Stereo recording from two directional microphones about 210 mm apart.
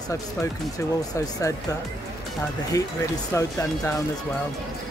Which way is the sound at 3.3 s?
15° left (ahead or behind).